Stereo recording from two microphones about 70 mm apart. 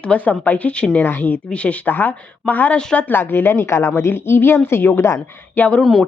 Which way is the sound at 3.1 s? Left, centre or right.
Left.